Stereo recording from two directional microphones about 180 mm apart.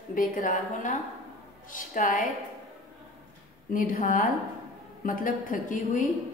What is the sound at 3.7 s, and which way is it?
A woman's voice, 50° left (ahead or behind).